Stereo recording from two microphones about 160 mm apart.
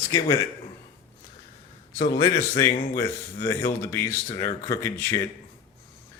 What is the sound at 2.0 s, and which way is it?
Speech, 25° left (ahead or behind).